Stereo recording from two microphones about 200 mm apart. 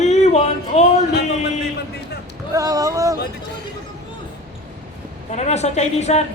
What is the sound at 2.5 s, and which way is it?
Speech, 15° right (ahead or behind).